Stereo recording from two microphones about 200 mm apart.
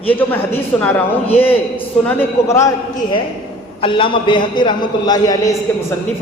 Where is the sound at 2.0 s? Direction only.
10° left (ahead or behind).